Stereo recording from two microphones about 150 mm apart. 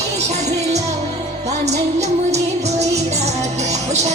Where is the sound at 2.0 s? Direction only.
50° right (ahead or behind).